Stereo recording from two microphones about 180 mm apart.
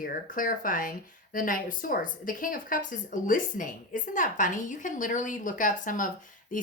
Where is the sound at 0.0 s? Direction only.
50° left (ahead or behind).